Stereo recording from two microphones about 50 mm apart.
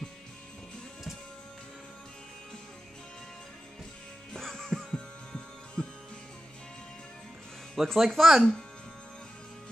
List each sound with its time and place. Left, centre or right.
4.3 s music: centre
4.9 s heart sounds: centre
7.7 s speech: centre